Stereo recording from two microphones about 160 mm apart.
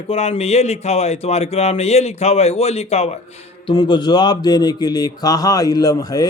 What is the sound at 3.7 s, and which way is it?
Speech, 30° left (ahead or behind).